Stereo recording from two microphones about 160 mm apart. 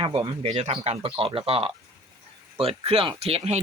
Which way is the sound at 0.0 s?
35° right (ahead or behind).